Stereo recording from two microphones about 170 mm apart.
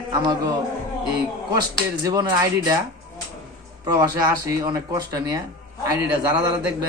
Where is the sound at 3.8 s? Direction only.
20° right (ahead or behind).